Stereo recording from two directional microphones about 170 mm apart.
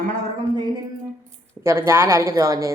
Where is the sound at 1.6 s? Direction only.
15° right (ahead or behind).